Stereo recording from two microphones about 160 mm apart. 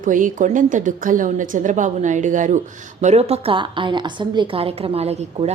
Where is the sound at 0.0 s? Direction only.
55° right (ahead or behind).